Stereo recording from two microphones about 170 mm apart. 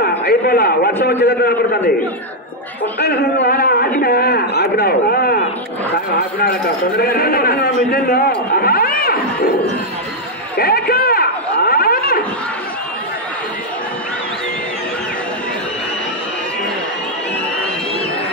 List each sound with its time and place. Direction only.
0.0 s a man's voice: 65° left (ahead or behind)
3.0 s a man's voice: 70° left (ahead or behind)
7.0 s a man's voice: 60° left (ahead or behind)
10.6 s a sound: 60° left (ahead or behind)